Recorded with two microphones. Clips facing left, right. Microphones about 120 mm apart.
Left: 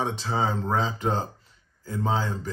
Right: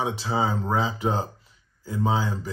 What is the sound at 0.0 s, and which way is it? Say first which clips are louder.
Speech: right 1 dB; 5° right (ahead or behind).